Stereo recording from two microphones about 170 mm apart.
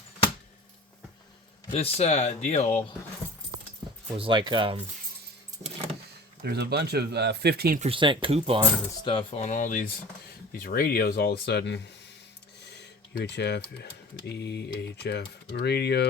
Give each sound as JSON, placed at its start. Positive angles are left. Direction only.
{"t": 1.7, "sound": "speech", "side_deg": 35}
{"t": 4.2, "sound": "speech", "side_deg": -25}
{"t": 6.4, "sound": "speech", "side_deg": -75}
{"t": 7.8, "sound": "speech", "side_deg": -30}
{"t": 9.0, "sound": "speech", "side_deg": 35}
{"t": 12.6, "sound": "a sound", "side_deg": 80}
{"t": 14.3, "sound": "speech", "side_deg": 80}